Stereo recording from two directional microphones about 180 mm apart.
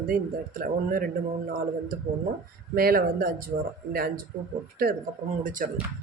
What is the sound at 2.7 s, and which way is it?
Speech, 55° right (ahead or behind).